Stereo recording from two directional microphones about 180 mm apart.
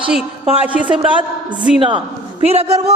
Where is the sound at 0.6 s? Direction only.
10° right (ahead or behind).